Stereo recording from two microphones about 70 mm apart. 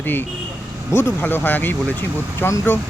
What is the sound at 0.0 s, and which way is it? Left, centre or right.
Speech, left.